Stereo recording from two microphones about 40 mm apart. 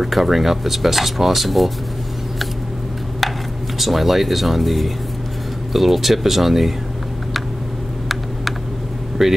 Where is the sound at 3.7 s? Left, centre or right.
Centre.